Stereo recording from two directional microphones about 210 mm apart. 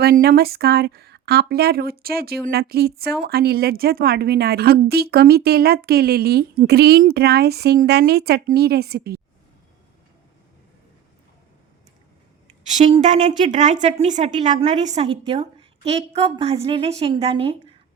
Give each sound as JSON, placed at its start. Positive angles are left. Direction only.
{"t": 0.0, "sound": "a woman's voice", "side_deg": -45}
{"t": 12.6, "sound": "a woman's voice", "side_deg": -30}